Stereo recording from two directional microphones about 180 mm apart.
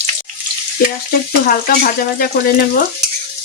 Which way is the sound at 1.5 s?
55° left (ahead or behind).